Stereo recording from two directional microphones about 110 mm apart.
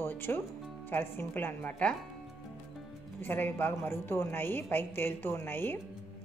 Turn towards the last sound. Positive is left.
turn(degrees=20)  # may be behind; listen again after turning